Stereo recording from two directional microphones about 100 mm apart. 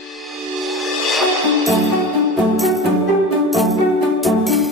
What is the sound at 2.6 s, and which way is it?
Music, centre (ahead or behind).